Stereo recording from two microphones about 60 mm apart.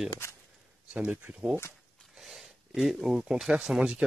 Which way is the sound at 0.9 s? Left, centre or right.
Centre.